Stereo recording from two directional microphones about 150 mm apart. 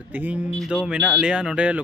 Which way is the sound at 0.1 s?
10° right (ahead or behind).